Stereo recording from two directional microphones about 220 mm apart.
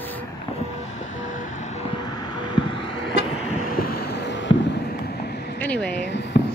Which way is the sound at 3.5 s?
40° left (ahead or behind).